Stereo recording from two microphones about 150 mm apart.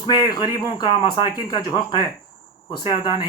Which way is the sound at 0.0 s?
30° left (ahead or behind).